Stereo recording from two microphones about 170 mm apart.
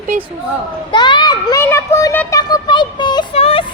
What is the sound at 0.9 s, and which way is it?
A child's voice, 25° left (ahead or behind).